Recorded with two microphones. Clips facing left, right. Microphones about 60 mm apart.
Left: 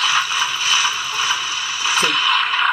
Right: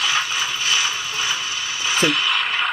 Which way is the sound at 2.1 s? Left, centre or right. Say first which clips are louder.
Left 3 dB; centre.